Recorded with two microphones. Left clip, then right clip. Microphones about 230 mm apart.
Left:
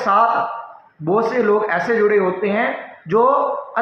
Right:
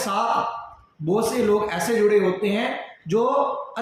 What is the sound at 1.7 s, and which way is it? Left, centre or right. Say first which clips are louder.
Speech: left 4 dB; right.